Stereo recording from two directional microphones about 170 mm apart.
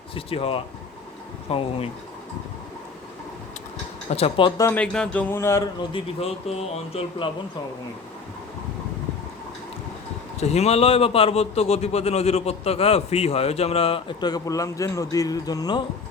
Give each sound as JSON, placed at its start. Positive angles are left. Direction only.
{"t": 0.1, "sound": "a man's voice", "side_deg": 35}
{"t": 4.1, "sound": "speech", "side_deg": 35}
{"t": 4.8, "sound": "speech", "side_deg": 10}
{"t": 5.9, "sound": "a man's voice", "side_deg": 35}
{"t": 10.4, "sound": "a man's voice", "side_deg": 40}